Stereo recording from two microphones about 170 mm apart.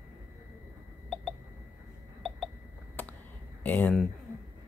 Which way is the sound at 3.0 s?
10° left (ahead or behind).